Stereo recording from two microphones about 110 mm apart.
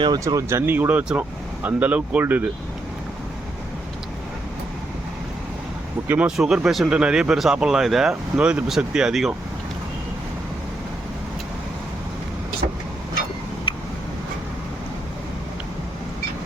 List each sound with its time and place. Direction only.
0.0 s speech: 35° right (ahead or behind)
0.6 s speech: 20° right (ahead or behind)
6.1 s speech: 10° right (ahead or behind)